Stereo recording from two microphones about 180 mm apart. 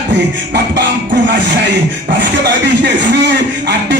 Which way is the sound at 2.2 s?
75° right (ahead or behind).